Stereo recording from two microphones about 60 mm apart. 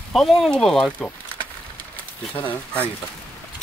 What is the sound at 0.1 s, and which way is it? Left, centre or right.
Speech, centre.